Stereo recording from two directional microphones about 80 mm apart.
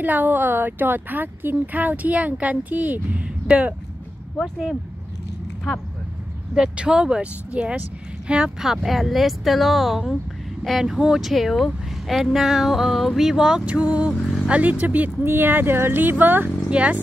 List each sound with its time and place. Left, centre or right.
0.0 s speech: right
4.4 s speech: centre
6.5 s speech: centre
13.7 s speech: centre
14.2 s speech: centre
14.5 s speech: centre